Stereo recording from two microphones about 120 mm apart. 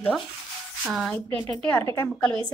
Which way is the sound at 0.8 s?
Centre (ahead or behind).